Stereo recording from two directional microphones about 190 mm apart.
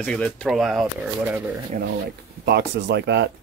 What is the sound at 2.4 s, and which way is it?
Speech, 60° right (ahead or behind).